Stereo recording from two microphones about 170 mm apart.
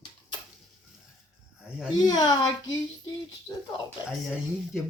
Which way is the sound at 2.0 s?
25° left (ahead or behind).